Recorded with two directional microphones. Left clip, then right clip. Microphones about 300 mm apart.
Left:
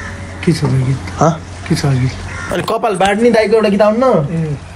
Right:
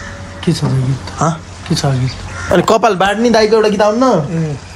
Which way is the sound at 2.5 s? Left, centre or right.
Right.